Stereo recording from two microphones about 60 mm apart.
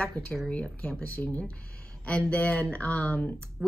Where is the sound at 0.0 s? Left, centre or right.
Centre.